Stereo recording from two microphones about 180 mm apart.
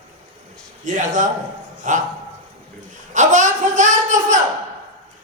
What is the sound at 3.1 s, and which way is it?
A man's voice, 45° right (ahead or behind).